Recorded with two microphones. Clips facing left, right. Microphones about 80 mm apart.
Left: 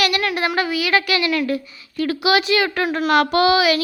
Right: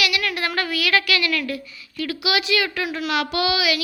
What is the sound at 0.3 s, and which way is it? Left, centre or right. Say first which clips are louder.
Speech: left 4 dB; left.